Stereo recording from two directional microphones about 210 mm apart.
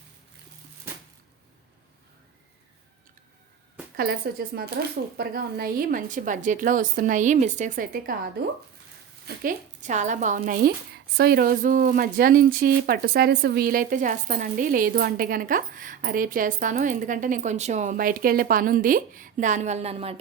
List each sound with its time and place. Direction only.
3.9 s speech: 45° right (ahead or behind); by 20.1 s 30° right (ahead or behind)